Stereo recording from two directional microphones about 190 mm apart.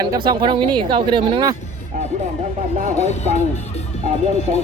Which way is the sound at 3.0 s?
35° left (ahead or behind).